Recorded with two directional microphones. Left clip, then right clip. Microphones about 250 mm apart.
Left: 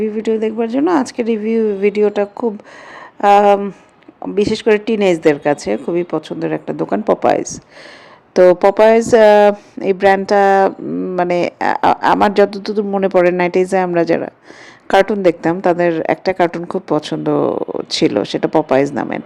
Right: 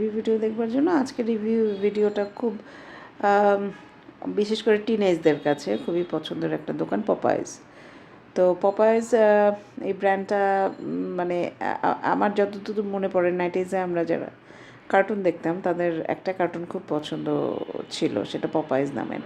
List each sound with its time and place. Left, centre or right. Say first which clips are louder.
0.0 s a woman's voice: left 7 dB; left